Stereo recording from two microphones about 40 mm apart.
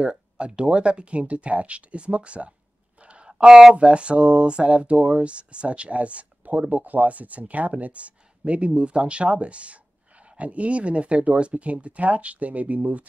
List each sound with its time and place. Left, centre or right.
0.0 s speech: right
3.0 s a sound: right
3.7 s speech: right